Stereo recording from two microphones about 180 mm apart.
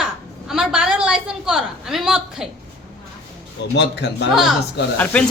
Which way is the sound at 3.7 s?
70° left (ahead or behind).